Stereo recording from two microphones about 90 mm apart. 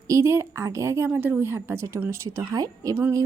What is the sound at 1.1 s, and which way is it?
Speech, 25° right (ahead or behind).